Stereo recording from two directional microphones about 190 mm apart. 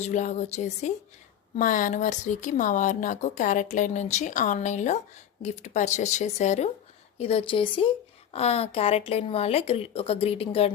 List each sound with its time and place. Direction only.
0.0 s speech: 40° left (ahead or behind)